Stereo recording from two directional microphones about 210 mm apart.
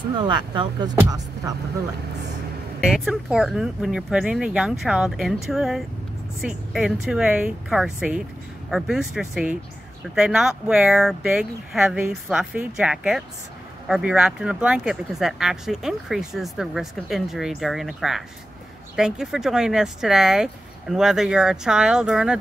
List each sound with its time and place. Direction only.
0.2 s speech: 20° right (ahead or behind)
2.8 s speech: centre (ahead or behind)